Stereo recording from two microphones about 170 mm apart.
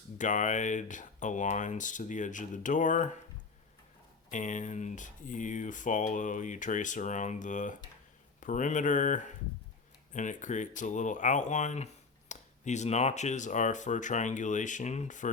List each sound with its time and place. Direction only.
0.2 s speech: 45° left (ahead or behind)
4.3 s speech: 45° left (ahead or behind)